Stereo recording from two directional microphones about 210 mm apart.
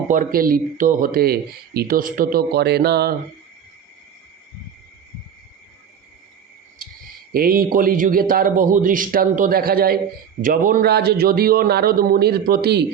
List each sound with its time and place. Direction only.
0.1 s speech: 40° right (ahead or behind)
7.3 s speech: 45° right (ahead or behind)